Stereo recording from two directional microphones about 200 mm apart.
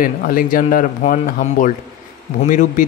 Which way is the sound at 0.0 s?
45° left (ahead or behind).